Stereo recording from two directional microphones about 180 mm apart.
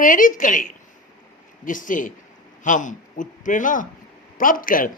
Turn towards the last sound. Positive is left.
turn(degrees=50)  # may be behind; listen again after turning